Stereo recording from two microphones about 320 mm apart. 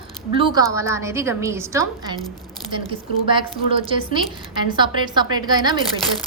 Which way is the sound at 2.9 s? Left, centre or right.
Centre.